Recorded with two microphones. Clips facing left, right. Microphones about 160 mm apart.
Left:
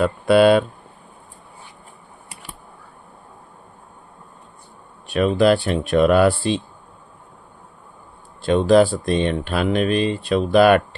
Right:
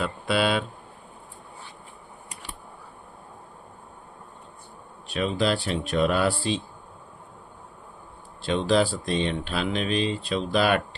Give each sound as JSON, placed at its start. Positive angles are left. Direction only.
{"t": 0.0, "sound": "speech", "side_deg": 50}
{"t": 5.1, "sound": "speech", "side_deg": 55}
{"t": 8.4, "sound": "speech", "side_deg": 50}